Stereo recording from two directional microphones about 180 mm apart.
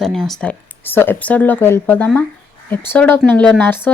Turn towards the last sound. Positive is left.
turn(degrees=10)  # may be behind; listen again after turning